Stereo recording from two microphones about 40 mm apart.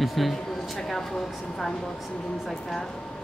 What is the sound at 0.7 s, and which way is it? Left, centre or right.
Speech, centre.